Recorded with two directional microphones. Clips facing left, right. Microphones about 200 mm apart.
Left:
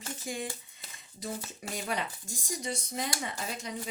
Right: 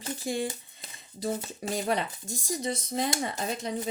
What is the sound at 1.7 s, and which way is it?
A woman's voice, 35° right (ahead or behind).